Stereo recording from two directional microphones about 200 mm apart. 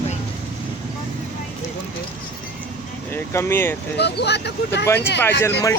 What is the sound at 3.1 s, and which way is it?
Speech, 10° left (ahead or behind).